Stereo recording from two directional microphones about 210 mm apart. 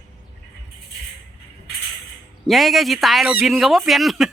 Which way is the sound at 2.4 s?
Centre (ahead or behind).